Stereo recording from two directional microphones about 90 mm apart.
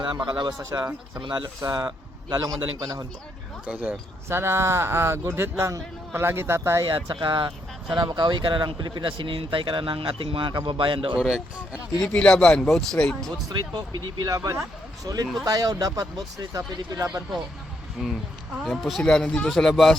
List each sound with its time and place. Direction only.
0.0 s speech: 60° right (ahead or behind)
0.7 s speech: 35° right (ahead or behind)
1.2 s speech: 55° right (ahead or behind)
3.7 s speech: 15° right (ahead or behind)
4.3 s speech: 30° right (ahead or behind)
6.9 s speech: 60° right (ahead or behind)
11.2 s speech: 10° right (ahead or behind)
11.9 s speech: 10° left (ahead or behind)
13.2 s speech: 50° right (ahead or behind)
18.0 s speech: centre (ahead or behind)